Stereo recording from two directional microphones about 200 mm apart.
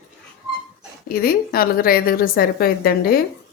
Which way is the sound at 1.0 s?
50° left (ahead or behind).